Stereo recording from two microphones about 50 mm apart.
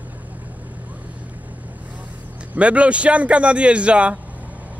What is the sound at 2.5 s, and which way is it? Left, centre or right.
Speech, right.